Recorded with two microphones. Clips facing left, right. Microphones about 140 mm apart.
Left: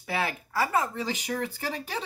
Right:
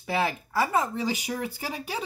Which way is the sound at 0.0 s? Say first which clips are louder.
Right 3 dB; 25° right (ahead or behind).